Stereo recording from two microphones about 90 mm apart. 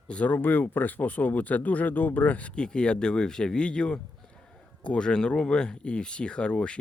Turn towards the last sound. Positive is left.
turn(degrees=10)  # may be behind; listen again after turning